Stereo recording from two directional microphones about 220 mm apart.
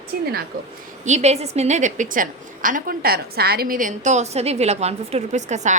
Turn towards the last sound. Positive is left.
turn(degrees=-30)  # may be behind; listen again after turning